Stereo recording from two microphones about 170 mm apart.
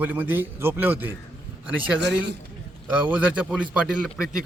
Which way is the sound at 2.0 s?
90° right.